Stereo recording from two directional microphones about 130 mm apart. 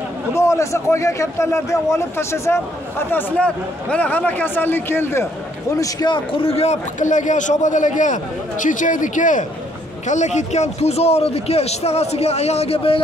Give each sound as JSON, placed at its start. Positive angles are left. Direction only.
{"t": 0.3, "sound": "a man's voice", "side_deg": 20}
{"t": 5.8, "sound": "a man's voice", "side_deg": 30}
{"t": 10.0, "sound": "a man's voice", "side_deg": 65}